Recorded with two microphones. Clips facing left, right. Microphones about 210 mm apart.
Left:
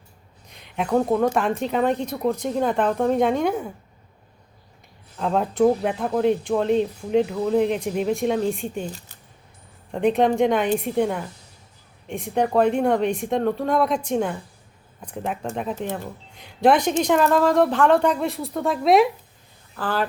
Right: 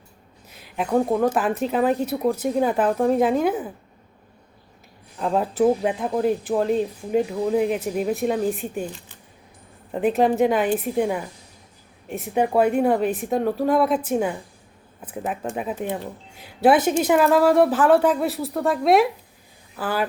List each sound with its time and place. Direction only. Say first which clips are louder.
0.5 s a sound: even; 5° right (ahead or behind)
1.2 s speech: even; 5° right (ahead or behind)
5.2 s speech: even; 5° right (ahead or behind)
9.9 s a woman's voice: even; 5° right (ahead or behind)